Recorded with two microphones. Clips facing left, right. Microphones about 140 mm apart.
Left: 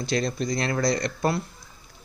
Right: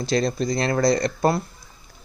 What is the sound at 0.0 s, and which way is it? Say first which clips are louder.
Speech: right 4 dB; 35° right (ahead or behind).